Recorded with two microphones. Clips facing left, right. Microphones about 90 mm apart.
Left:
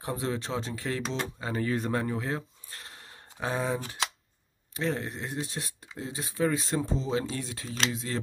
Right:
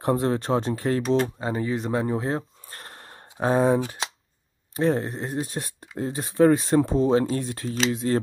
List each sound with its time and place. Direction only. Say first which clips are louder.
0.0 s speech: right 9 dB; 50° right (ahead or behind)
1.4 s speech: right 3 dB; 20° right (ahead or behind)
2.1 s a sound: right 6 dB; 35° right (ahead or behind)
4.7 s speech: right 8 dB; 40° right (ahead or behind)